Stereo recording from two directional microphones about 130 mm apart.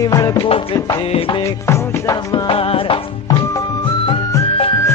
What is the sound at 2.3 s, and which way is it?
Music, 40° left (ahead or behind).